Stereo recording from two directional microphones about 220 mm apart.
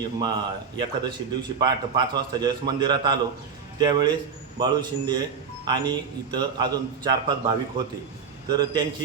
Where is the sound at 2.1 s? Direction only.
20° right (ahead or behind).